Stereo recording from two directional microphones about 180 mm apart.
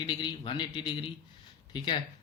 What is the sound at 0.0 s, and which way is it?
Speech, 25° left (ahead or behind).